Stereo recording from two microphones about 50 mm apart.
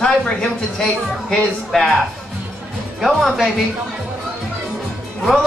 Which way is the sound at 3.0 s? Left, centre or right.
Centre.